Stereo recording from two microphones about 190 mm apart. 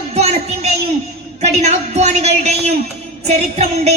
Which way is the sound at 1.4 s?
35° right (ahead or behind).